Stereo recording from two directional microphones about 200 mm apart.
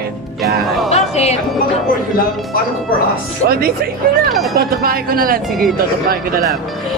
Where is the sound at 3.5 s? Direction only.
50° right (ahead or behind).